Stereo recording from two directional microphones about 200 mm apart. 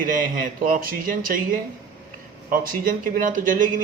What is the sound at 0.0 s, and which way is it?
Speech, 40° right (ahead or behind).